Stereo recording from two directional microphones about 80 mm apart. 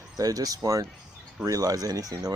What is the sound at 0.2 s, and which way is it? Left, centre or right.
Speech, right.